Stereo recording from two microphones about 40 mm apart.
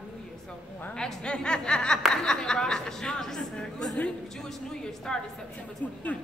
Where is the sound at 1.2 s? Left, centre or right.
Left.